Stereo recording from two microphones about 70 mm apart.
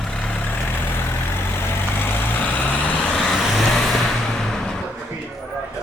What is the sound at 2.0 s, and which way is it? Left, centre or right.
Vehicle, left.